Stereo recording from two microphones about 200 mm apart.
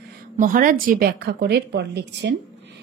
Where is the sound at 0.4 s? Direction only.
45° right (ahead or behind).